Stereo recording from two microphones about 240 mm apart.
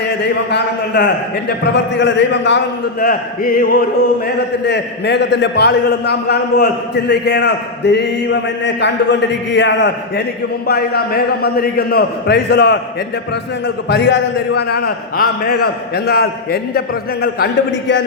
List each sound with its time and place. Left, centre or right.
0.2 s a man's voice: left
3.0 s a man's voice: left
13.8 s a man's voice: left